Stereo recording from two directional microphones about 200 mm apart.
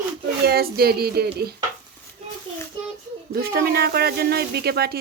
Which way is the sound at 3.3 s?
50° right (ahead or behind).